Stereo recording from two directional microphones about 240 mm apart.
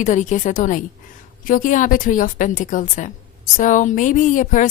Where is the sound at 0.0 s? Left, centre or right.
Left.